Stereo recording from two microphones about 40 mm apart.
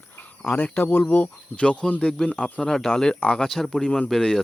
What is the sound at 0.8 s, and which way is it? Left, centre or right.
Speech, left.